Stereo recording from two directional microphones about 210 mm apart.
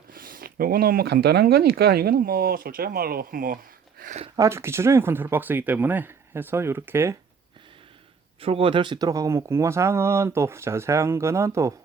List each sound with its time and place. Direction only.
0.1 s speech: 45° right (ahead or behind)
4.4 s speech: 15° right (ahead or behind)
8.4 s speech: 25° right (ahead or behind)